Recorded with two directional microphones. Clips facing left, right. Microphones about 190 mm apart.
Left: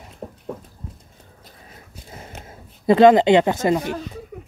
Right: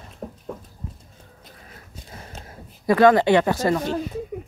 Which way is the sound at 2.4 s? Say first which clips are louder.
Left 4 dB; 20° left (ahead or behind).